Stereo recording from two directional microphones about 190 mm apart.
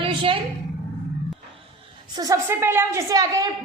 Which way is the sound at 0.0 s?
25° right (ahead or behind).